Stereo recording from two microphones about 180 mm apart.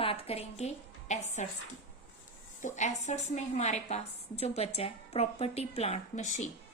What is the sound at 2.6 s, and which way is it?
A woman's voice, 45° left (ahead or behind).